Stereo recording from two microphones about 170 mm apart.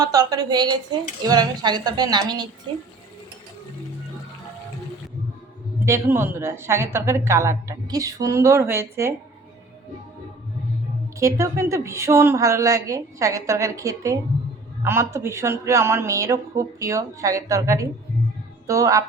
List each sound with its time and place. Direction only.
0.0 s a woman's voice: 20° right (ahead or behind)
5.8 s a woman's voice: 15° right (ahead or behind)
11.2 s a woman's voice: 15° right (ahead or behind)